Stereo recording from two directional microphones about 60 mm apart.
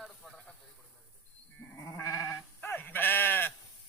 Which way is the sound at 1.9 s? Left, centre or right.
Left.